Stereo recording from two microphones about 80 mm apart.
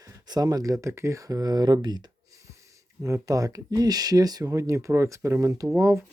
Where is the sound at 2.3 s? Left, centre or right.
Right.